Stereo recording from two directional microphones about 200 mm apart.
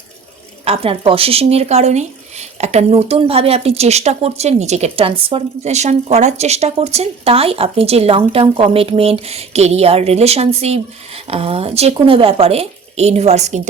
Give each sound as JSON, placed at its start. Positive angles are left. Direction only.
{"t": 0.6, "sound": "speech", "side_deg": -30}